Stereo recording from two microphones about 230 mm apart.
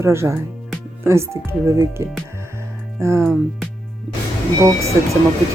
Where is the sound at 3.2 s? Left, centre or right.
Centre.